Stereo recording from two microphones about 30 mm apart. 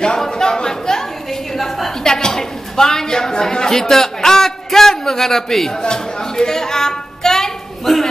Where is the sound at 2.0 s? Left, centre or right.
Left.